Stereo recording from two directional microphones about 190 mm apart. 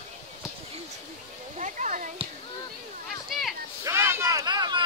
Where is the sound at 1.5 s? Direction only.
40° right (ahead or behind).